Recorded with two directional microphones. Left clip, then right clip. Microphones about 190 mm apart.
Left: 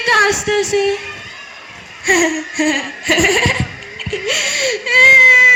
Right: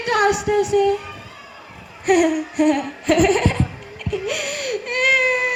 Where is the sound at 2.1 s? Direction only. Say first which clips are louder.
Left 3 dB; 55° right (ahead or behind).